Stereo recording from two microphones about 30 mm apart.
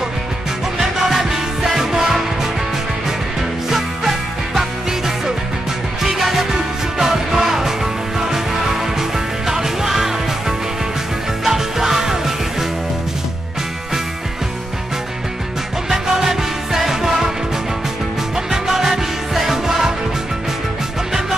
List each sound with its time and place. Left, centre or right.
0.7 s music: centre
3.6 s music: centre
9.5 s music: centre
11.4 s music: centre
15.9 s music: centre
18.3 s music: centre